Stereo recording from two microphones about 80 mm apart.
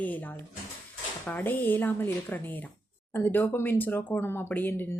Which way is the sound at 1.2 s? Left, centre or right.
Left.